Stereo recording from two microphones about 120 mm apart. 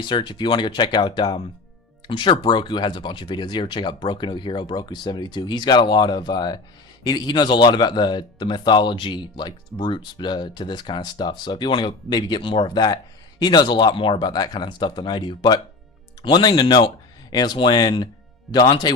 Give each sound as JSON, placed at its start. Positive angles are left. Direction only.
{"t": 0.0, "sound": "speech", "side_deg": 40}